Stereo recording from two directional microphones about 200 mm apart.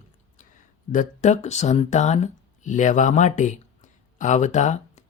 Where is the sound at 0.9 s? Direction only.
35° left (ahead or behind).